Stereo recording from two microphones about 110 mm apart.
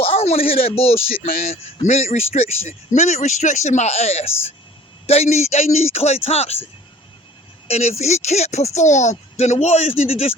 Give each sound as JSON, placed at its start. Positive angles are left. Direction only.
{"t": 0.0, "sound": "speech", "side_deg": 65}
{"t": 1.8, "sound": "speech", "side_deg": 90}
{"t": 2.6, "sound": "speech", "side_deg": 90}
{"t": 7.7, "sound": "speech", "side_deg": 75}